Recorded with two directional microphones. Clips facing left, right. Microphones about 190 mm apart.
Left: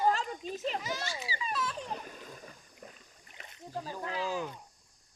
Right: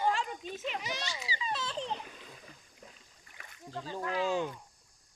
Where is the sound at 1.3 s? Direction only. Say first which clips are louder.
Right 1 dB; 25° right (ahead or behind).